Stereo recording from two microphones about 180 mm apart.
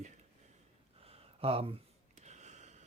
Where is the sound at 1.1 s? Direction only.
35° right (ahead or behind).